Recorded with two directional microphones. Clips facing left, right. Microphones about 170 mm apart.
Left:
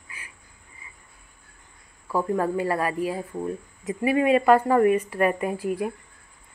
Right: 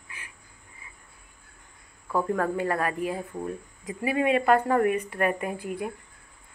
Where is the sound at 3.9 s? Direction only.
35° left (ahead or behind).